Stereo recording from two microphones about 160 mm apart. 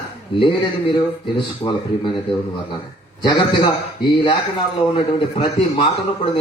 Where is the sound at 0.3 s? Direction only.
35° left (ahead or behind).